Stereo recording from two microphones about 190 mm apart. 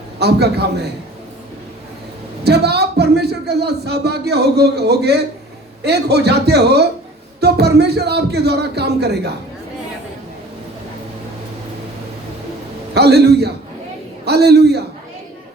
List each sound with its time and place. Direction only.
0.2 s a man's voice: 60° right (ahead or behind)
2.4 s a man's voice: 60° right (ahead or behind)
12.9 s a man's voice: 60° right (ahead or behind)